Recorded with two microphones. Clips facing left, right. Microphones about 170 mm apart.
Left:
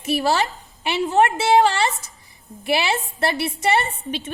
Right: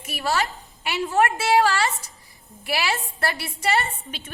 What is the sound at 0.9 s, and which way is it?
A woman's voice, 20° left (ahead or behind).